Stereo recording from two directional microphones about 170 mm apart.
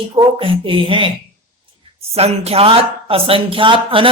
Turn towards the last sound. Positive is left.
turn(degrees=-30)  # may be behind; listen again after turning